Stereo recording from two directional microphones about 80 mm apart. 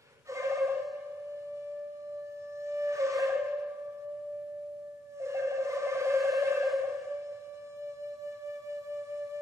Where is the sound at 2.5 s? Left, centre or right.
Right.